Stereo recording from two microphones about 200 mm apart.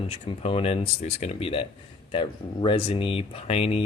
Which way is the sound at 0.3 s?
25° left (ahead or behind).